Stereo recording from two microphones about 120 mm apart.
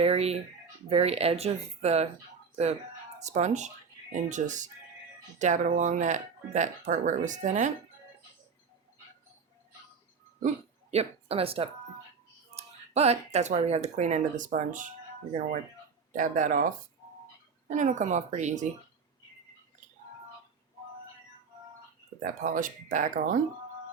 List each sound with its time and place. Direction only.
0.0 s speech: 55° right (ahead or behind)
3.2 s speech: 75° right (ahead or behind)
4.1 s speech: 90° right
10.9 s speech: 55° right (ahead or behind); by 14.8 s 90° right
16.1 s speech: 90° right
22.2 s speech: 90° right